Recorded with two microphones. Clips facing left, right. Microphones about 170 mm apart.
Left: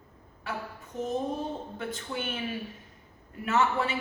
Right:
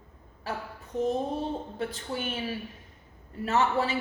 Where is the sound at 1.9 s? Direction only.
35° right (ahead or behind).